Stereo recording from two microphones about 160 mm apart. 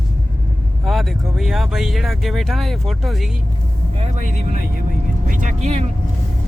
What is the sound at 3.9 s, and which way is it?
Speech, 45° right (ahead or behind).